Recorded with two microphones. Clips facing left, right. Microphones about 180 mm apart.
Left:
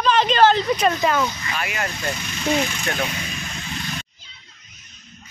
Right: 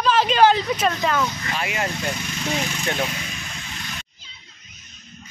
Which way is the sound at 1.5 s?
25° right (ahead or behind).